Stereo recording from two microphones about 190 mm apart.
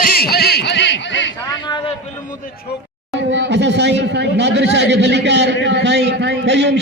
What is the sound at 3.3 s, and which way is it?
A man's voice, 70° right (ahead or behind).